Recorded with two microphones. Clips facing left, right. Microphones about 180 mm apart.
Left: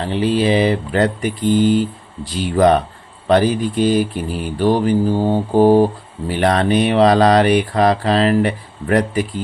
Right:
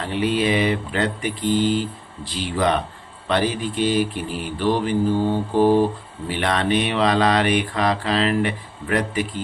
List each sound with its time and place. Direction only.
0.0 s speech: 30° left (ahead or behind)